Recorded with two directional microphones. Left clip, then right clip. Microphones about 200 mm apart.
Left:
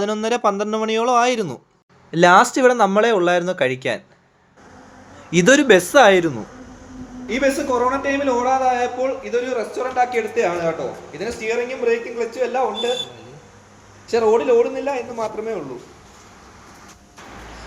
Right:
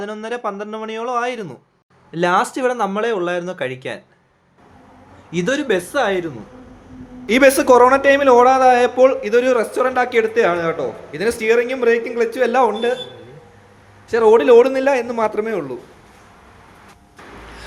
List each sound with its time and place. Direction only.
0.0 s speech: 30° left (ahead or behind); by 4.0 s 15° left (ahead or behind)
5.3 s speech: 30° left (ahead or behind)
7.3 s a man's voice: 60° right (ahead or behind)
14.3 s a man's voice: 45° right (ahead or behind)